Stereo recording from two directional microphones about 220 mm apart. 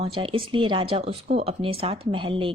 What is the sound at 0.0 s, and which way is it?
Speech, 25° right (ahead or behind).